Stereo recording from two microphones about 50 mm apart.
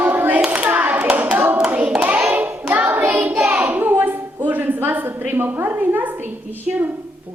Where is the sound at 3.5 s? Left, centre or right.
Right.